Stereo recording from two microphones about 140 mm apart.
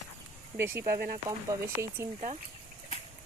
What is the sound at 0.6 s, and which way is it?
Speech, 15° right (ahead or behind).